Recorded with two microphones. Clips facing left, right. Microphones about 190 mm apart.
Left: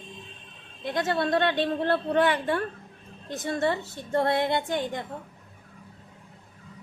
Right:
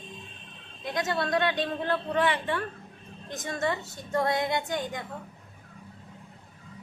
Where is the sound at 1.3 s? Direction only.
55° left (ahead or behind).